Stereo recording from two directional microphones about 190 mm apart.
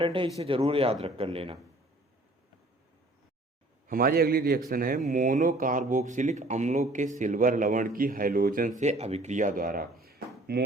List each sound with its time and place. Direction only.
0.0 s speech: 25° right (ahead or behind)
3.8 s a man's voice: 50° right (ahead or behind)